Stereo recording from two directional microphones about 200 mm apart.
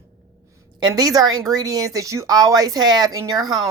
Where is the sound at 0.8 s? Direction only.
20° right (ahead or behind).